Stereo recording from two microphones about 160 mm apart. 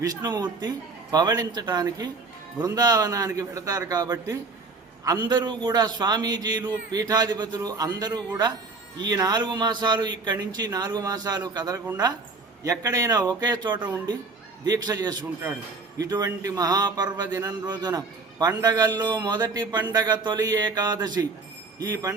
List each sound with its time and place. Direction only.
0.0 s a man's voice: 25° right (ahead or behind)